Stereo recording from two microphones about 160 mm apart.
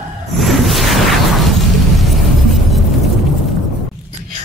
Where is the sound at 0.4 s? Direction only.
Centre (ahead or behind).